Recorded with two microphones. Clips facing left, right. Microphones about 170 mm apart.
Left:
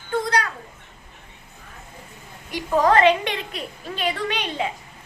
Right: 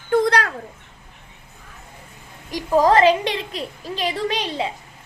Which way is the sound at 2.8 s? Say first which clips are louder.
Right 1 dB; 35° right (ahead or behind).